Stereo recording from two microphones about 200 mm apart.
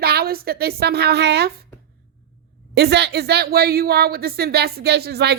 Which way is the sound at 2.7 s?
55° right (ahead or behind).